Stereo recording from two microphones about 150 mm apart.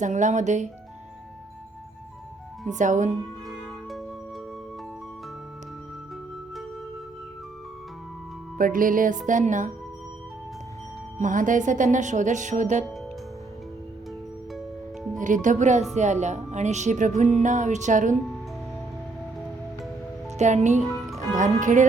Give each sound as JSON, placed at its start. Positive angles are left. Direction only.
{"t": 0.0, "sound": "speech", "side_deg": -55}
{"t": 2.6, "sound": "speech", "side_deg": -55}
{"t": 8.5, "sound": "speech", "side_deg": -65}
{"t": 11.2, "sound": "speech", "side_deg": -60}
{"t": 15.2, "sound": "speech", "side_deg": -60}
{"t": 20.4, "sound": "speech", "side_deg": -50}